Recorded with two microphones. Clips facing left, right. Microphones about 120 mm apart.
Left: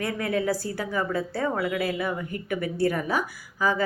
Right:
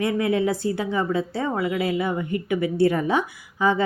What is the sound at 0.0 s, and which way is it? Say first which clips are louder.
A woman's voice: right 5 dB; 20° right (ahead or behind).